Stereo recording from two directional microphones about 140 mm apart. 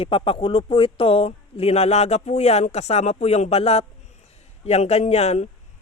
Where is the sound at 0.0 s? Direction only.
40° left (ahead or behind).